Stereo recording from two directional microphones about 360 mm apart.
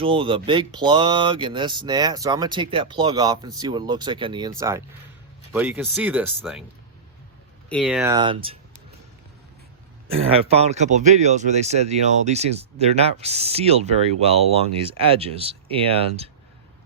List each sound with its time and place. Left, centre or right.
0.0 s speech: centre
7.7 s speech: centre
10.1 s speech: centre